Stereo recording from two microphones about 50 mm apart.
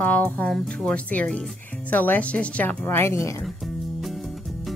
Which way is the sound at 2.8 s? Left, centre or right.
Left.